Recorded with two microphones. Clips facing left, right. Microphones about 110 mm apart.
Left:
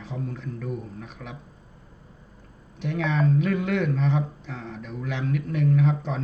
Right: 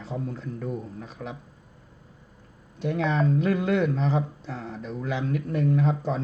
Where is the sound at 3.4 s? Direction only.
35° right (ahead or behind).